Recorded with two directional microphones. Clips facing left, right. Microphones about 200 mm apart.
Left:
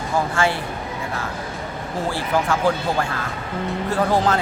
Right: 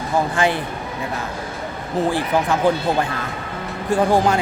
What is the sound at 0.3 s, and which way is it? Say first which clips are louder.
Speech: right 1 dB; 20° right (ahead or behind).